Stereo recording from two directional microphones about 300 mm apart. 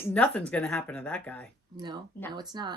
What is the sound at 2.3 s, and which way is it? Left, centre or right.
Speech, centre.